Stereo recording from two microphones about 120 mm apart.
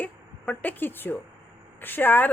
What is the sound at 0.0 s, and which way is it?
Speech, 15° left (ahead or behind).